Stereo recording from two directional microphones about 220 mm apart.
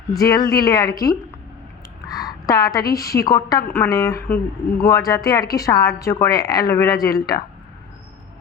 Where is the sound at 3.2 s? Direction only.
15° left (ahead or behind).